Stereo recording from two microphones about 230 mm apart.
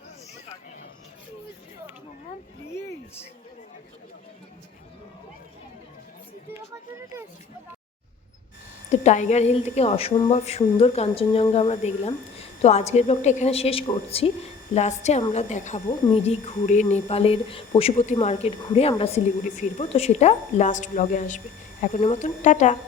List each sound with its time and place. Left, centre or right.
8.9 s speech: left